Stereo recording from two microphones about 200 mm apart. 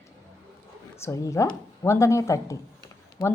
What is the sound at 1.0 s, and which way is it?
A woman's voice, 15° left (ahead or behind).